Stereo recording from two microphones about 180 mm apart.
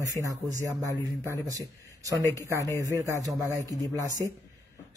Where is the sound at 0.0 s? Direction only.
20° right (ahead or behind).